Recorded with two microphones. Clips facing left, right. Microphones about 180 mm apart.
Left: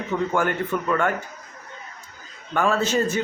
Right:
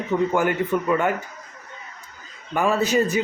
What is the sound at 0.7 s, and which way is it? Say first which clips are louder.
Speech: right 2 dB; 20° right (ahead or behind).